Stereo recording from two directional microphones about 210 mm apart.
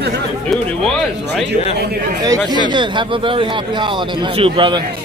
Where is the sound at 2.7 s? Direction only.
20° right (ahead or behind).